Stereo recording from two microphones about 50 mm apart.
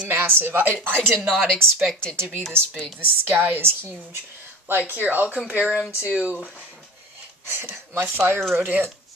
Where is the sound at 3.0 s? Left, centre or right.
Right.